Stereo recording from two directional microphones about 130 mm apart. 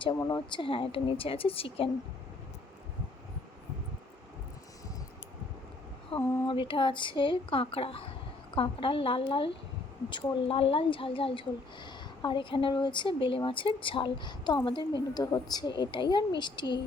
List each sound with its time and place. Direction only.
0.2 s a woman's voice: 30° left (ahead or behind)
0.6 s a woman's voice: 45° left (ahead or behind)
6.1 s speech: 15° left (ahead or behind)
6.4 s a woman's voice: 40° left (ahead or behind)